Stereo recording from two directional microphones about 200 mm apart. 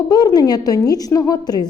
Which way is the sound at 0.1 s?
20° left (ahead or behind).